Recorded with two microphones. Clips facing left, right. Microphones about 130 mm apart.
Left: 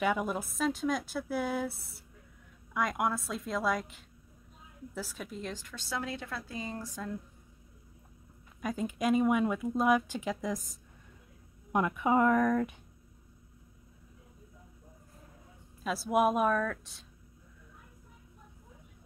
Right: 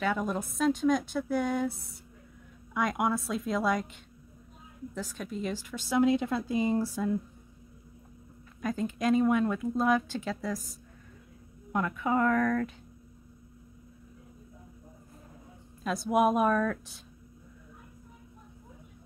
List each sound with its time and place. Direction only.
0.0 s a woman's voice: 10° left (ahead or behind); by 7.2 s 10° right (ahead or behind)
8.5 s speech: 10° left (ahead or behind)
15.8 s a woman's voice: 5° left (ahead or behind)